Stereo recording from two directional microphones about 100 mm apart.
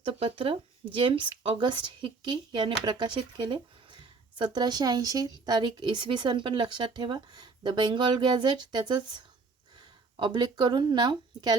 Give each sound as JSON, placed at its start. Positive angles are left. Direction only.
{"t": 0.0, "sound": "speech", "side_deg": -65}